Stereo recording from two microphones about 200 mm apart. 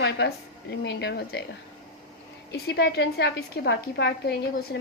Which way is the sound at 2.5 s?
55° left (ahead or behind).